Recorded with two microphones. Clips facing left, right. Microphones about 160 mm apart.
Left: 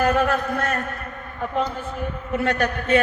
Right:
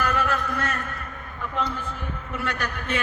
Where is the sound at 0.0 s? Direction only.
50° left (ahead or behind).